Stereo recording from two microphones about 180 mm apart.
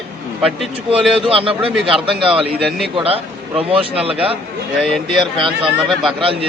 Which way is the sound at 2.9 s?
30° right (ahead or behind).